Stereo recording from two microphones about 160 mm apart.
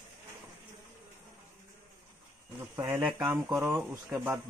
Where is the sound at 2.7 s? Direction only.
25° right (ahead or behind).